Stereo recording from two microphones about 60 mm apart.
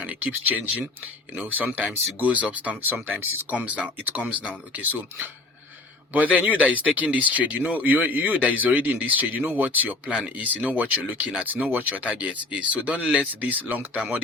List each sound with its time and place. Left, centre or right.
0.0 s speech: right